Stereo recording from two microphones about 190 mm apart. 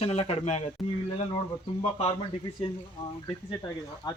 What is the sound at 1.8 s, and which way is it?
Speech, 35° left (ahead or behind).